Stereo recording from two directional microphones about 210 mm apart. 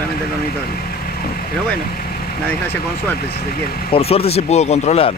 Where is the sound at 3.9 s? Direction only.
30° left (ahead or behind).